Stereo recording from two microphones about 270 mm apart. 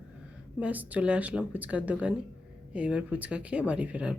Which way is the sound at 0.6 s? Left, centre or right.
Centre.